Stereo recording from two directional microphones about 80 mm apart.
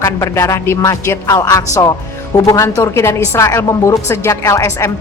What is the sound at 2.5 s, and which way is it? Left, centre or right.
Speech, left.